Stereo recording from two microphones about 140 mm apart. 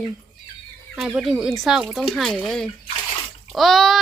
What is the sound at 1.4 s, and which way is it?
Speech, centre (ahead or behind).